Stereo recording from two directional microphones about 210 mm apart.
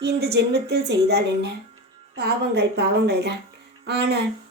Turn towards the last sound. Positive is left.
turn(degrees=-55)  # may be behind; listen again after turning